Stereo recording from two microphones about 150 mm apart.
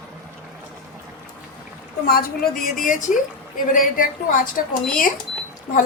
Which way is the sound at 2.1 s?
85° left.